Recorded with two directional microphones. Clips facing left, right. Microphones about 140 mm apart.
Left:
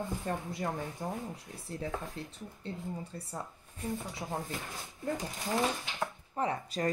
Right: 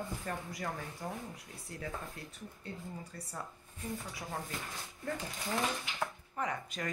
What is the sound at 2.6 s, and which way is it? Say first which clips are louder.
Speech: left 6 dB; 25° left (ahead or behind).